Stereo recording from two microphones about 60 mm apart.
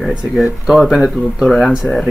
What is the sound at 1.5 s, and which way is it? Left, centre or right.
Speech, centre.